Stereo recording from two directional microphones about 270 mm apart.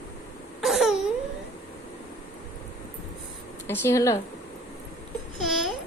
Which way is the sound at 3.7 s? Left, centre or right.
Centre.